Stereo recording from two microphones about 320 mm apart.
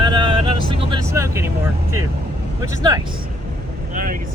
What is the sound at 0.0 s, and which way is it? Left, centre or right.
Vehicle, centre.